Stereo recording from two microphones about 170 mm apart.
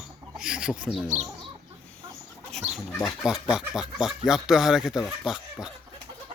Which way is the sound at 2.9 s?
15° left (ahead or behind).